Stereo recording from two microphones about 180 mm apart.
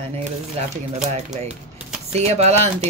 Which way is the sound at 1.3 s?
35° right (ahead or behind).